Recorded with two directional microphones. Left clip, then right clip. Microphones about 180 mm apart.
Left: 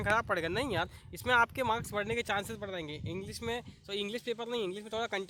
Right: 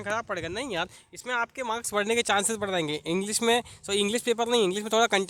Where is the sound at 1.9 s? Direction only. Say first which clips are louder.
Right 8 dB; 30° right (ahead or behind).